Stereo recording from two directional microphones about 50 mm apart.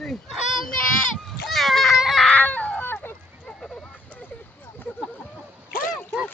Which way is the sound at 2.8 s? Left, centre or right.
Left.